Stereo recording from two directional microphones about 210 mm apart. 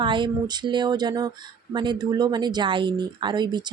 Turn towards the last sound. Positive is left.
turn(degrees=-20)  # may be behind; listen again after turning